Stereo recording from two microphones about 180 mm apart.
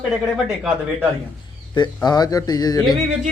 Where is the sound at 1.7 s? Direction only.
25° left (ahead or behind).